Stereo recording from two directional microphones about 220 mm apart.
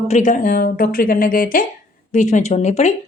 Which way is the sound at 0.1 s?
35° left (ahead or behind).